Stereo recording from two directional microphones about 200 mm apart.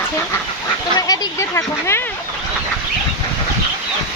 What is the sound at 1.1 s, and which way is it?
Speech, 15° left (ahead or behind).